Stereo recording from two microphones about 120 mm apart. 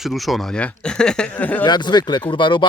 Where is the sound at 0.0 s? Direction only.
Centre (ahead or behind).